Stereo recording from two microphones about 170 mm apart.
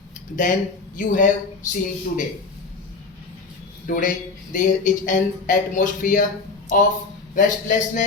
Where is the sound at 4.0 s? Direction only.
50° left (ahead or behind).